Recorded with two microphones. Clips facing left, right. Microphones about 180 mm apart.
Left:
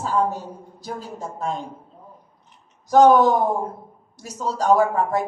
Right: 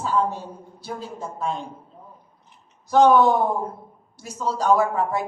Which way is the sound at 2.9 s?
40° left (ahead or behind).